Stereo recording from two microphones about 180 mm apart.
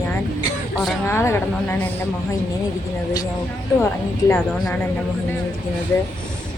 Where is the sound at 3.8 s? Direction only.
10° left (ahead or behind).